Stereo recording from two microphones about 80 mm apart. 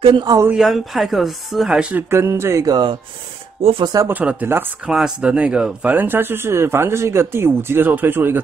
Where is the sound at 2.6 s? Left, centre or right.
Right.